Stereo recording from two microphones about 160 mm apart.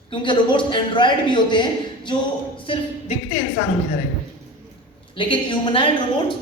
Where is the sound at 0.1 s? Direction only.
30° left (ahead or behind).